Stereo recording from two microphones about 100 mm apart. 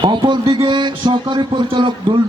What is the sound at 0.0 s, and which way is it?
A man's voice, 50° right (ahead or behind).